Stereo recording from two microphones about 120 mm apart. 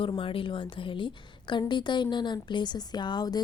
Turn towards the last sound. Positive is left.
turn(degrees=35)  # may be behind; listen again after turning